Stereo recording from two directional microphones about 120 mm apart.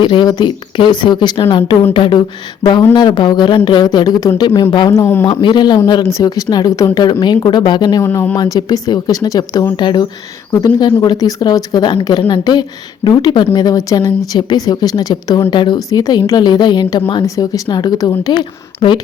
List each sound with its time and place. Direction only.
0.0 s a man's voice: 45° left (ahead or behind)
4.9 s speech: 20° left (ahead or behind)
5.3 s a man's voice: 40° left (ahead or behind)
8.0 s speech: 20° left (ahead or behind)
8.4 s a man's voice: 30° left (ahead or behind)